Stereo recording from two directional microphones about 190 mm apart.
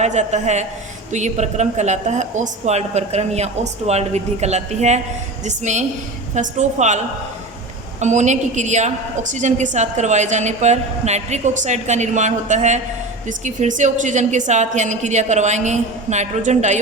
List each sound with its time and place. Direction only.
0.0 s a woman's voice: 35° right (ahead or behind)